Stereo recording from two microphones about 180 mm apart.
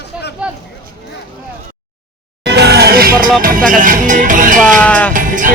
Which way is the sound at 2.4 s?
65° right (ahead or behind).